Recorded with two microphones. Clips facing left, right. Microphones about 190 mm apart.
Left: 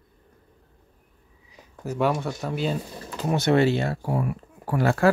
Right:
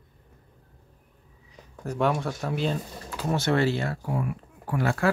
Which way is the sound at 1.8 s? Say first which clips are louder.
Left 1 dB; 5° left (ahead or behind).